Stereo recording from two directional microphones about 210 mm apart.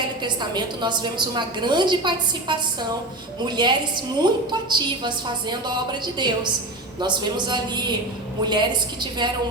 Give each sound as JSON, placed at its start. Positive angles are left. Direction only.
{"t": 0.2, "sound": "a woman's voice", "side_deg": -20}